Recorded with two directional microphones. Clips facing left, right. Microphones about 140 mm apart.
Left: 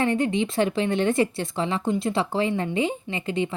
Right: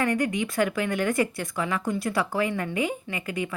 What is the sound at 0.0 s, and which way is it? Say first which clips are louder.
Speech: left 3 dB; 25° left (ahead or behind).